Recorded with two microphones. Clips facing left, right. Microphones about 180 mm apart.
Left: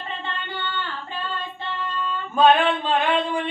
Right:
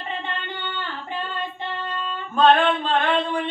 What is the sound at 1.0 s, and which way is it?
Female singing, 20° right (ahead or behind).